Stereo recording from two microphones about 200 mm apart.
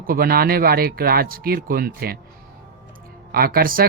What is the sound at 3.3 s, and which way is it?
Speech, 45° right (ahead or behind).